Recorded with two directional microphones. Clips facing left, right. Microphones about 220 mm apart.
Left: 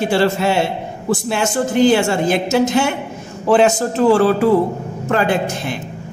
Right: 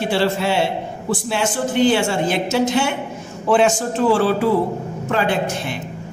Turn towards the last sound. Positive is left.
turn(degrees=45)  # may be behind; listen again after turning